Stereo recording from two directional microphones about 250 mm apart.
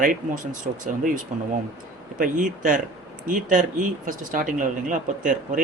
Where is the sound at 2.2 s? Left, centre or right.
Right.